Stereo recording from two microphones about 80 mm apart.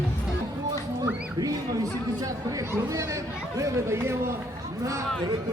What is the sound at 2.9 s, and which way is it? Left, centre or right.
A man's voice, right.